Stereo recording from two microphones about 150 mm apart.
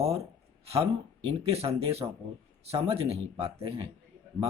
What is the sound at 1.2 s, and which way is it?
Speech, 40° right (ahead or behind).